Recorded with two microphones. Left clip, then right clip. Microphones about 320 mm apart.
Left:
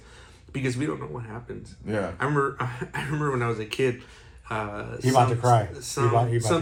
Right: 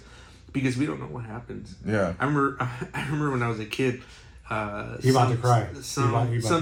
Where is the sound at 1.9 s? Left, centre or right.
Right.